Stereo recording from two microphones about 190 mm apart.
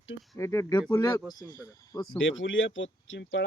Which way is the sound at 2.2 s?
85° left.